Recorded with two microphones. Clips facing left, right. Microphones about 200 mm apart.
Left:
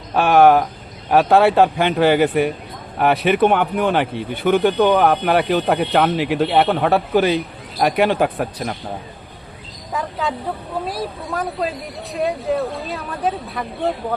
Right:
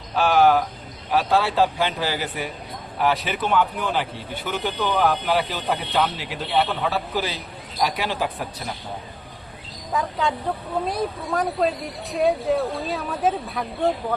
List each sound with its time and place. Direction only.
0.1 s speech: 55° left (ahead or behind)
9.9 s a woman's voice: centre (ahead or behind)